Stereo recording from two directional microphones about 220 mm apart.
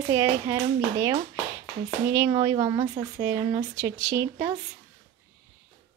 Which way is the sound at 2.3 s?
20° right (ahead or behind).